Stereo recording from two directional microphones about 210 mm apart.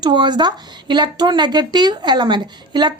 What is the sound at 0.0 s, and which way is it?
A woman's voice, 20° right (ahead or behind).